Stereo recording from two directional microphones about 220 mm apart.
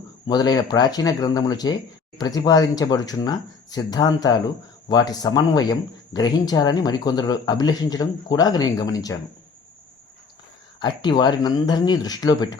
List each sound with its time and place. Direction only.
0.3 s speech: 20° left (ahead or behind)
10.8 s speech: 20° left (ahead or behind)